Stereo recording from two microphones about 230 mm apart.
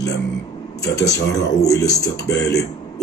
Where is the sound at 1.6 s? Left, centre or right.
Centre.